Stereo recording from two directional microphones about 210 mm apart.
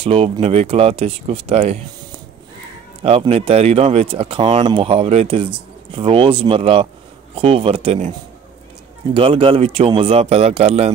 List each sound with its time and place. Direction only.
0.0 s speech: 30° right (ahead or behind)
3.0 s speech: 25° right (ahead or behind)
9.1 s speech: 25° right (ahead or behind)